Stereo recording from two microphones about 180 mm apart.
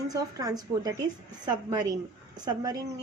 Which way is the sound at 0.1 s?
20° right (ahead or behind).